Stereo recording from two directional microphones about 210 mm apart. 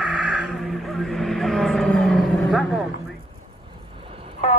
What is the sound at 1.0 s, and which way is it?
Vehicle, centre (ahead or behind).